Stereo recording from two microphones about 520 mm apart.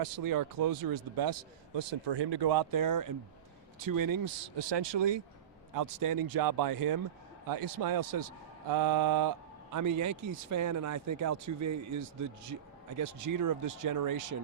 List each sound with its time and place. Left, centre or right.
0.0 s speech: right
1.7 s speech: right
5.7 s speech: right